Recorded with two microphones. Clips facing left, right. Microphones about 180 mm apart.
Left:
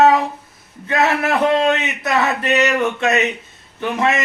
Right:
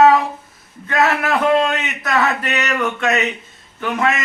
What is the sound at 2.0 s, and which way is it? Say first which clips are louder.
Speech: even; 25° left (ahead or behind).